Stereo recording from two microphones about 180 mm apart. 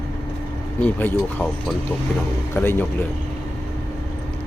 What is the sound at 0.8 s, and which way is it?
Speech, 10° left (ahead or behind).